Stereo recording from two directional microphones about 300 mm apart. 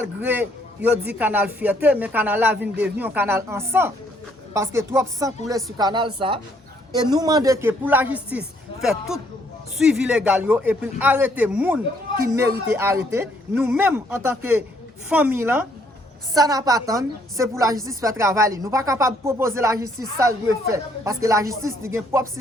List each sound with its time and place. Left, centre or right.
0.2 s a man's voice: centre